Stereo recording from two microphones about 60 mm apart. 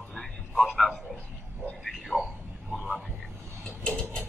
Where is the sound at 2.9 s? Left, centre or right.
Centre.